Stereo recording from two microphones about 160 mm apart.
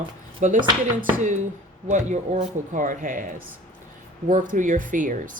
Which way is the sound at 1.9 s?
50° right (ahead or behind).